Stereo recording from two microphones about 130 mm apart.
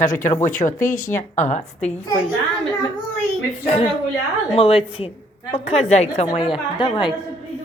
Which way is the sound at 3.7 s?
45° left (ahead or behind).